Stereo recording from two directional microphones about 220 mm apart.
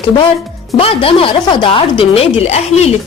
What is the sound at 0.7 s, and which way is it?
A woman's voice, 25° left (ahead or behind).